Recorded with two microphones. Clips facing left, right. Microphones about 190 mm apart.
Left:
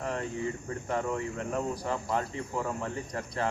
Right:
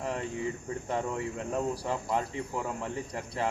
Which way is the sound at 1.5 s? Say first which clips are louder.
Right 1 dB; 10° right (ahead or behind).